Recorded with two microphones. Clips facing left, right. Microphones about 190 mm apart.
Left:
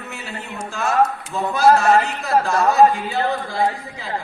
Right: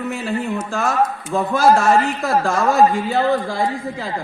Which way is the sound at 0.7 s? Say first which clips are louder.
Left 2 dB; 55° right (ahead or behind).